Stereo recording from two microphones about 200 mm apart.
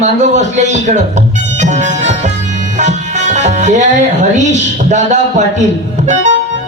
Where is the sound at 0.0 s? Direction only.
35° right (ahead or behind).